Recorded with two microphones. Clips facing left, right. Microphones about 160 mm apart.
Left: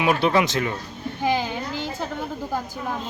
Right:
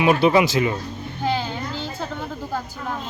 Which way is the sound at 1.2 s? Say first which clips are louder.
Left 1 dB; 15° left (ahead or behind).